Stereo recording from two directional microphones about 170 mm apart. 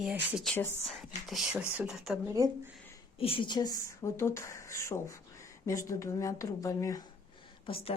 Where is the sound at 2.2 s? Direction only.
15° right (ahead or behind).